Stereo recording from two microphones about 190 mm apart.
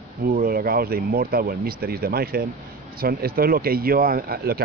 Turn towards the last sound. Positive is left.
turn(degrees=-50)  # may be behind; listen again after turning